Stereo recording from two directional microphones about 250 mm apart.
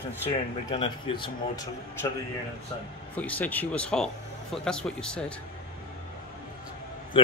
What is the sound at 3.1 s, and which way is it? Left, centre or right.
Speech, centre.